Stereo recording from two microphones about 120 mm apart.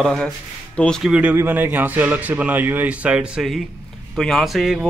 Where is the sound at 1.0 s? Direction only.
10° right (ahead or behind).